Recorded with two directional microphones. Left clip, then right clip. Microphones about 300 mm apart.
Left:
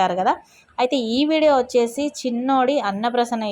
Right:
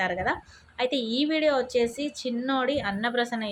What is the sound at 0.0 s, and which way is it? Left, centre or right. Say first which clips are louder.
A woman's voice: left 8 dB; centre.